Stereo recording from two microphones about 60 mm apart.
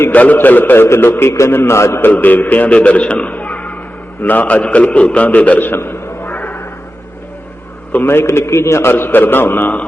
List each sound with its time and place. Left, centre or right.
0.1 s a man's voice: left
2.0 s a man's voice: left
8.0 s a man's voice: left